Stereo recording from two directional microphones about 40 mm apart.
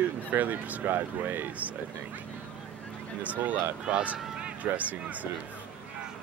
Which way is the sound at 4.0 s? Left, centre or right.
Right.